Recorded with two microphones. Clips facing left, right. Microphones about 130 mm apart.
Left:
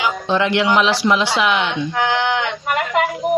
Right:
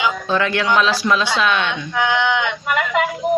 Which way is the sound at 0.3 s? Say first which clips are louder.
Left 2 dB; 20° left (ahead or behind).